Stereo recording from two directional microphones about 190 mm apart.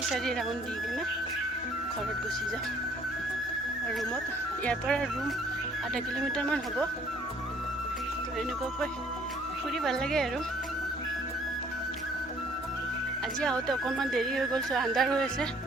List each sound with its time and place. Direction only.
0.1 s speech: centre (ahead or behind)
4.6 s speech: 5° left (ahead or behind)
9.8 s speech: centre (ahead or behind)
13.4 s speech: 5° left (ahead or behind)